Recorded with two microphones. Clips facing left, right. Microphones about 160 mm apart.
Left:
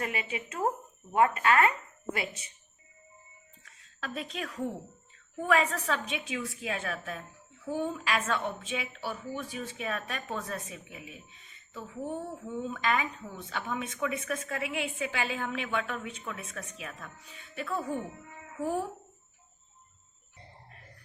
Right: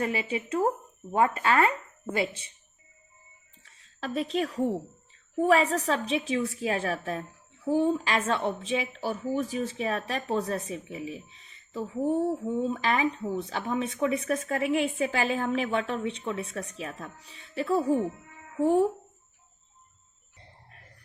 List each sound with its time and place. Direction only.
0.0 s a woman's voice: 30° right (ahead or behind)
3.6 s a sound: 35° right (ahead or behind)
5.4 s a woman's voice: 35° right (ahead or behind)